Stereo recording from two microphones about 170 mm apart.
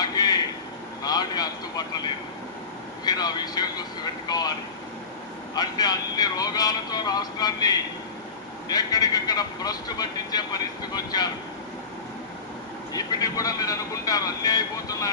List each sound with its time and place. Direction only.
0.0 s a sound: 25° left (ahead or behind)
1.0 s speech: 25° left (ahead or behind)
3.0 s speech: 25° left (ahead or behind)
5.5 s speech: 25° left (ahead or behind)
12.9 s speech: 20° left (ahead or behind)